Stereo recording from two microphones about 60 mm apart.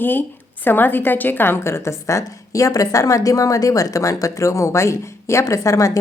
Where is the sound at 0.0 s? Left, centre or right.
Left.